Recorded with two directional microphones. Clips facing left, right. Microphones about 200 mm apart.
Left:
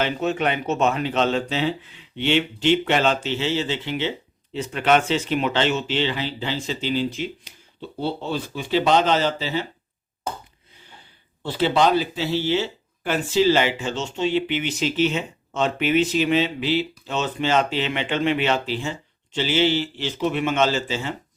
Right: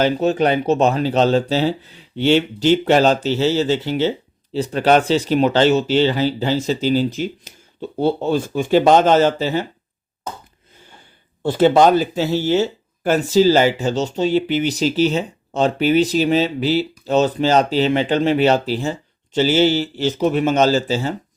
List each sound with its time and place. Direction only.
0.0 s speech: 35° right (ahead or behind)
11.4 s speech: 50° right (ahead or behind)